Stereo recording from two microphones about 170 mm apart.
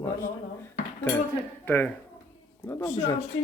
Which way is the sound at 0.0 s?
15° left (ahead or behind).